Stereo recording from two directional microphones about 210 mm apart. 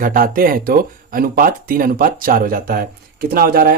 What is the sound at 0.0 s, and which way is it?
Speech, 40° right (ahead or behind).